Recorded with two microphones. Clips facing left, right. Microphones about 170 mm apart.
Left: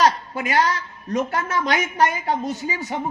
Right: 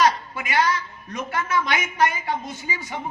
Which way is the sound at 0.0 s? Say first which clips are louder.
Left 2 dB; 40° left (ahead or behind).